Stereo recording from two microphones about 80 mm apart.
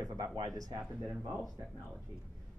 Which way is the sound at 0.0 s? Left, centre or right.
Right.